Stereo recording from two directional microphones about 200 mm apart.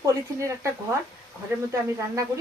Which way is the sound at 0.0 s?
15° right (ahead or behind).